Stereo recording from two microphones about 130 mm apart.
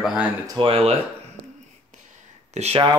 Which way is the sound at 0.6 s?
45° right (ahead or behind).